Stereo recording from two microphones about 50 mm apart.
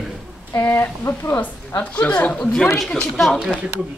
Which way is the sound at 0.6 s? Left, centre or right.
Left.